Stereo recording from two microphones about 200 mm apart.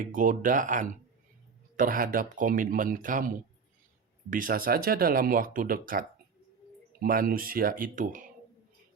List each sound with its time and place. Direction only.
0.0 s speech: 40° right (ahead or behind)